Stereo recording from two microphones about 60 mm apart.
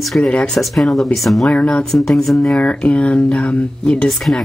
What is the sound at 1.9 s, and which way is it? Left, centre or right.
Speech, centre.